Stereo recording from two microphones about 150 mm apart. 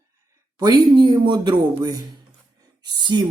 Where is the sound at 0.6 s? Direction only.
30° right (ahead or behind).